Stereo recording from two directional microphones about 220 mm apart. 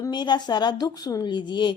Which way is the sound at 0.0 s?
20° left (ahead or behind).